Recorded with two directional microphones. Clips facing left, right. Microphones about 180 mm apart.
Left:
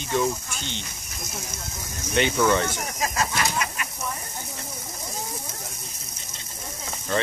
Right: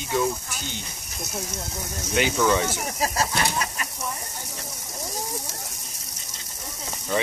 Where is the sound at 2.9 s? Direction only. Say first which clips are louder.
Right 1 dB; 35° right (ahead or behind).